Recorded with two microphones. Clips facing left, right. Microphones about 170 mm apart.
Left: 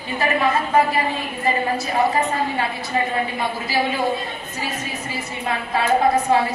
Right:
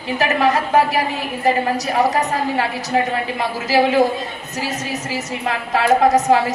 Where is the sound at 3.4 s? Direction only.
90° right.